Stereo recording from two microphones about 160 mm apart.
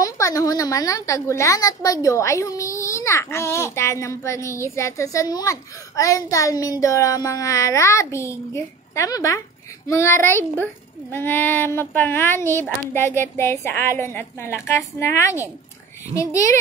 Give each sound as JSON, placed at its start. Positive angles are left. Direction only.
{"t": 0.0, "sound": "a woman's voice", "side_deg": 20}